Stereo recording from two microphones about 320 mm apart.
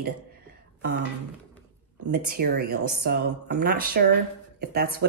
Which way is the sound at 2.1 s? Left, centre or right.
Right.